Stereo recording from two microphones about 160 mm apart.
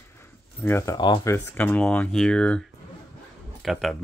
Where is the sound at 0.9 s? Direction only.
30° left (ahead or behind).